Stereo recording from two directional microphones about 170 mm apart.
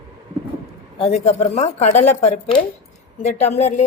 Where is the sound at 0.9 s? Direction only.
35° left (ahead or behind).